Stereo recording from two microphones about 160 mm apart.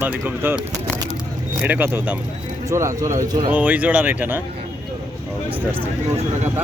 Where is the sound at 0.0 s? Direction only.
10° right (ahead or behind).